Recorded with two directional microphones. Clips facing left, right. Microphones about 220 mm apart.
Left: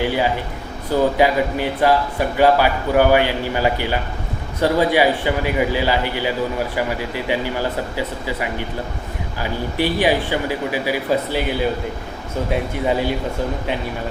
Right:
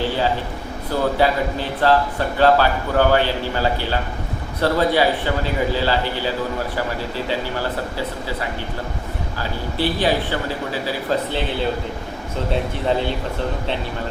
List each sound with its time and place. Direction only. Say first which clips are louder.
0.9 s speech: left 3 dB; 15° left (ahead or behind)